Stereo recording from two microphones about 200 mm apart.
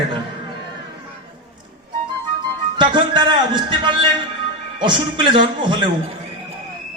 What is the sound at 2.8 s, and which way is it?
A man's voice, 25° right (ahead or behind).